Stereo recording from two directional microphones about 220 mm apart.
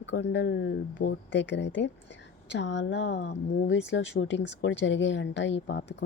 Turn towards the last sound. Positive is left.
turn(degrees=50)  # may be behind; listen again after turning